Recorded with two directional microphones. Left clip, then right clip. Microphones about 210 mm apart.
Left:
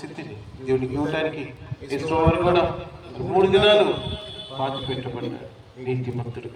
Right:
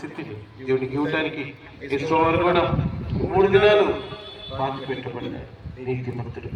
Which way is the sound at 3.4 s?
Centre (ahead or behind).